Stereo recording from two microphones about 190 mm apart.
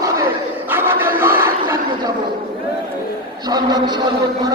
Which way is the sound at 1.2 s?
10° right (ahead or behind).